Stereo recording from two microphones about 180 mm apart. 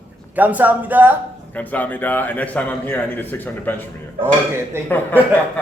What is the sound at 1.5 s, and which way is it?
A man's voice, 10° left (ahead or behind).